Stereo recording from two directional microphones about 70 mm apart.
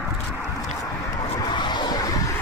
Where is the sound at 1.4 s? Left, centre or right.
Left.